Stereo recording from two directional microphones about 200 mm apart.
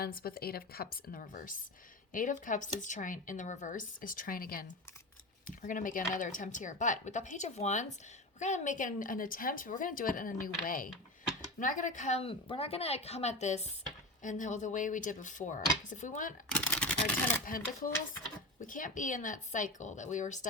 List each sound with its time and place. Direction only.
0.0 s a woman's voice: 45° left (ahead or behind)
16.6 s a sound: 5° left (ahead or behind)
17.4 s a woman's voice: 45° left (ahead or behind)